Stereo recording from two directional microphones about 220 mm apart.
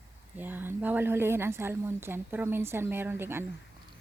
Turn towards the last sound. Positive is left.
turn(degrees=-10)  # may be behind; listen again after turning